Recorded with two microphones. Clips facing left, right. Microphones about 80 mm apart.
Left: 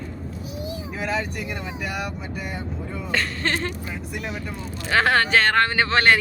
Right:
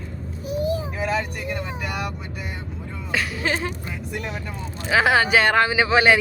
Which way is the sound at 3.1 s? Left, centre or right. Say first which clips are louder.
Right 1 dB; centre.